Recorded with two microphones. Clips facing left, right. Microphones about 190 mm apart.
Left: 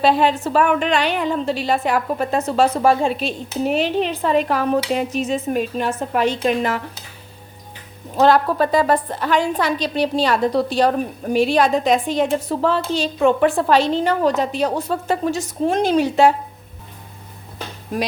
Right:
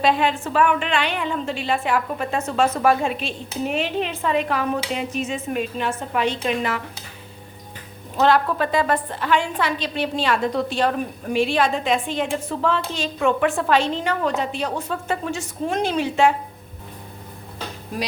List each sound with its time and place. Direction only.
0.0 s a woman's voice: 35° left (ahead or behind)
8.1 s a woman's voice: 40° left (ahead or behind)